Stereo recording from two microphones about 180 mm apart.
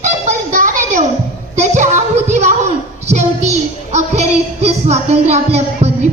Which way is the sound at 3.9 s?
40° right (ahead or behind).